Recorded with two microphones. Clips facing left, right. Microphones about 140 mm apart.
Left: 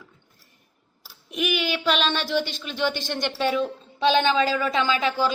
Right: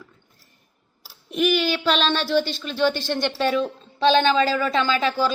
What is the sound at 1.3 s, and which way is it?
Speech, 10° left (ahead or behind).